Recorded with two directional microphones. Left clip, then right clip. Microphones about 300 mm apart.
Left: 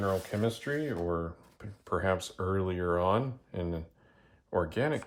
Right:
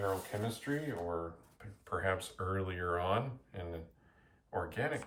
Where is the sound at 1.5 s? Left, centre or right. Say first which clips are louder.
Left 6 dB; centre.